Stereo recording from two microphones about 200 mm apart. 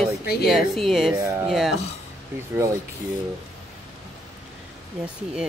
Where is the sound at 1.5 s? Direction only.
Centre (ahead or behind).